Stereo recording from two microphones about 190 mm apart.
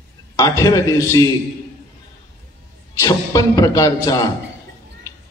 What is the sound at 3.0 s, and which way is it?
A man's voice, 20° left (ahead or behind).